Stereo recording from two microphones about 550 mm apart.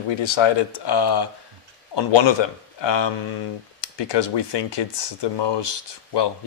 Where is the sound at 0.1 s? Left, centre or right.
Left.